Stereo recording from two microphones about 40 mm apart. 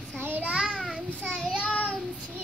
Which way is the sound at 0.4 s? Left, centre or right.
Right.